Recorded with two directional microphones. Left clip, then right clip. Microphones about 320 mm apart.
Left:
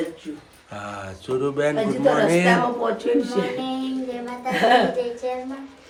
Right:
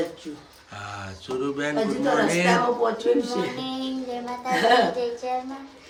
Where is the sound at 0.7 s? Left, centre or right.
Centre.